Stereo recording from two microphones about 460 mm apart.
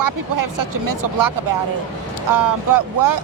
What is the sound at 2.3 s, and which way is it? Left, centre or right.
Speech, right.